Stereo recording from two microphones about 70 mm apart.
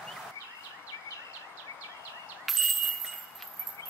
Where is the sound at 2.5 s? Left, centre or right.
Centre.